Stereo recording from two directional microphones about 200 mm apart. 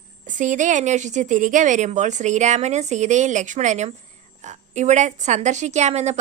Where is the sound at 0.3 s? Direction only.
40° right (ahead or behind).